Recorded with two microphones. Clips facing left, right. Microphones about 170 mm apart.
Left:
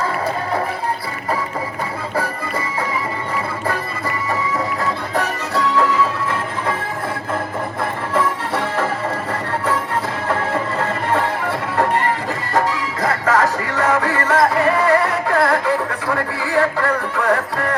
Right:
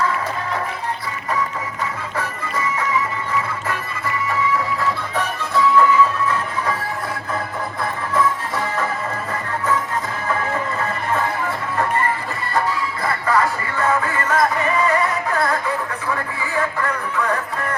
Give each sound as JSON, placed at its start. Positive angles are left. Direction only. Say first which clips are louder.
{"t": 4.5, "sound": "music", "louder": "even", "side_deg": 40}
{"t": 5.5, "sound": "music", "louder": "right 2 dB", "side_deg": 70}
{"t": 10.8, "sound": "music", "louder": "left 3 dB", "side_deg": 75}